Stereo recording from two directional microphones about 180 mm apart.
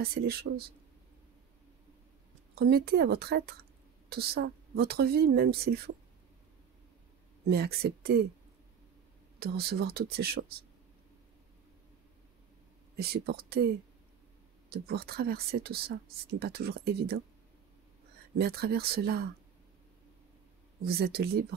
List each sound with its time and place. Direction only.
0.0 s speech: 60° right (ahead or behind)
2.5 s speech: 60° right (ahead or behind)
7.4 s speech: 65° right (ahead or behind)
9.4 s speech: 60° right (ahead or behind)
12.9 s speech: 60° right (ahead or behind)
14.7 s speech: 60° right (ahead or behind)
18.4 s speech: 60° right (ahead or behind)
20.8 s speech: 60° right (ahead or behind)